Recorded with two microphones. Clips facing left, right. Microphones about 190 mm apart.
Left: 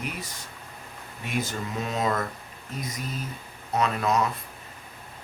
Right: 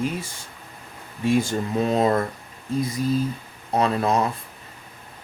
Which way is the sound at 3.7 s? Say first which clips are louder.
Right 4 dB; 30° right (ahead or behind).